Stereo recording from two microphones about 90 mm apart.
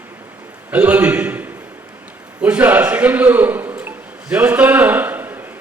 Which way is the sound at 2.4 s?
15° right (ahead or behind).